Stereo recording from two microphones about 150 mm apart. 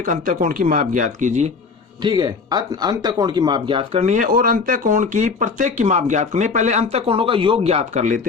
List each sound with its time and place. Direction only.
0.0 s speech: 60° right (ahead or behind)
2.0 s speech: 30° right (ahead or behind)
4.0 s speech: 55° right (ahead or behind)